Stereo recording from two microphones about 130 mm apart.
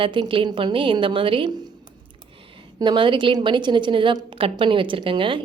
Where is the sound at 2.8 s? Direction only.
35° right (ahead or behind).